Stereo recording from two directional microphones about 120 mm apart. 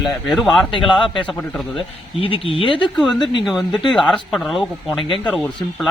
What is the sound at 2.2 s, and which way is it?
Speech, 50° left (ahead or behind).